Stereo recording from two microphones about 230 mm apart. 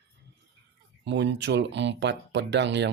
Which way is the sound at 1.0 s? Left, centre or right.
Right.